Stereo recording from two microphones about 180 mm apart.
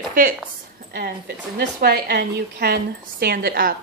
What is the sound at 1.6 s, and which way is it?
A woman's voice, 60° right (ahead or behind).